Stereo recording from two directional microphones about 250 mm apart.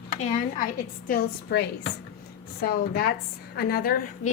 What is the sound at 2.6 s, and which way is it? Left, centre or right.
Speech, left.